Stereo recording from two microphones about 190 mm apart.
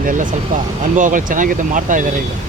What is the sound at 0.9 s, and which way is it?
Speech, 40° right (ahead or behind).